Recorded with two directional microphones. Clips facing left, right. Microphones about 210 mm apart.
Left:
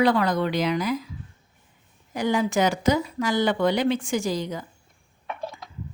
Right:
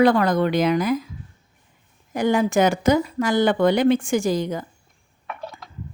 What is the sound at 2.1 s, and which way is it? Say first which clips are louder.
Speech: right 4 dB; 50° right (ahead or behind).